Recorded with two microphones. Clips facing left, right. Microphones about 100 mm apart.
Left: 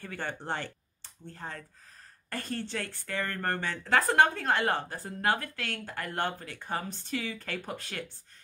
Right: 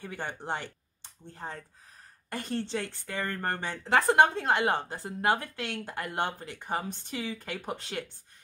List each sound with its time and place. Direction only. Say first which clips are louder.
0.0 s speech: even; 15° right (ahead or behind)